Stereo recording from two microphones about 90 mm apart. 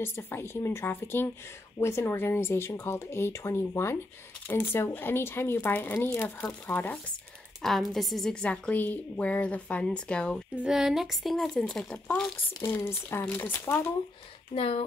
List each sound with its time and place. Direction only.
0.0 s speech: 25° left (ahead or behind)
7.6 s a woman's voice: centre (ahead or behind)
10.5 s speech: 10° right (ahead or behind)
11.9 s a woman's voice: 15° left (ahead or behind)
13.3 s speech: 25° left (ahead or behind)
14.5 s speech: 90° left